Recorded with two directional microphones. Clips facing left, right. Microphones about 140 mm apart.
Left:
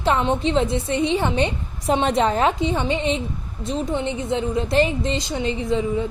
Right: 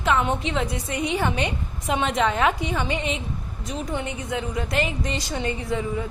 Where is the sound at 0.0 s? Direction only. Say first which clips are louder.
Left 3 dB; 30° left (ahead or behind).